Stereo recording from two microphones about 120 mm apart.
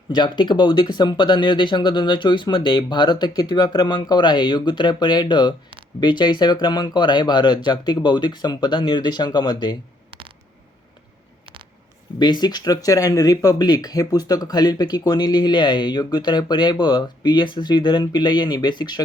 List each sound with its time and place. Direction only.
0.1 s speech: 40° left (ahead or behind)
10.1 s a sound: 45° right (ahead or behind)
12.2 s speech: 35° left (ahead or behind)